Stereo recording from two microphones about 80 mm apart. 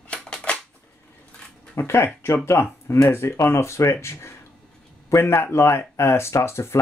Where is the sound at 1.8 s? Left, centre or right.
Left.